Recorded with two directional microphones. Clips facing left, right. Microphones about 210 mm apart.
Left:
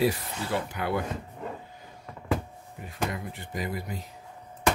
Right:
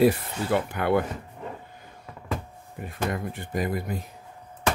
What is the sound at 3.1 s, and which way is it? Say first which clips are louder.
Speech: right 6 dB; 55° right (ahead or behind).